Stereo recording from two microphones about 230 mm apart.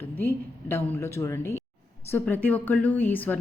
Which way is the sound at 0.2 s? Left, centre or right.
Centre.